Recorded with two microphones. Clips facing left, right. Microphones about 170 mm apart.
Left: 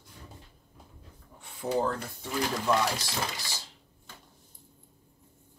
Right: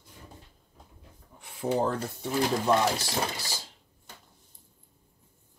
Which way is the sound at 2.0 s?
25° right (ahead or behind).